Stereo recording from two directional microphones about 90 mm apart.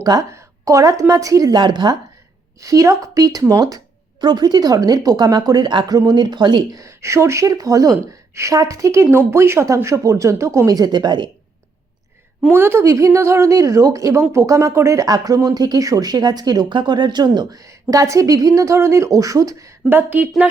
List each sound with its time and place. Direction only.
0.0 s speech: 45° right (ahead or behind)
0.3 s speech: 35° right (ahead or behind); by 2.0 s 55° right (ahead or behind)
2.6 s speech: 40° right (ahead or behind)
4.2 s speech: 55° right (ahead or behind)
6.7 s speech: 35° right (ahead or behind); by 11.3 s 55° right (ahead or behind)
12.5 s speech: 25° right (ahead or behind)
15.0 s speech: 45° right (ahead or behind)
19.9 s speech: 20° right (ahead or behind)